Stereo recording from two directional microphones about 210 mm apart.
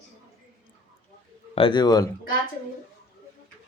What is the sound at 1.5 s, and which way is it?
Speech, 25° left (ahead or behind).